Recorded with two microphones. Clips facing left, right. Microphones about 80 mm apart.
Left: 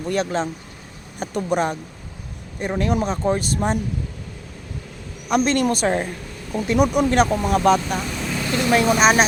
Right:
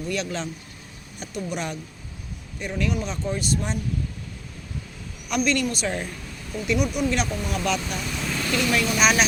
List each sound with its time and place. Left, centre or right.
0.0 s a woman's voice: left
5.3 s a woman's voice: left
8.1 s vehicle: centre
8.4 s a woman's voice: left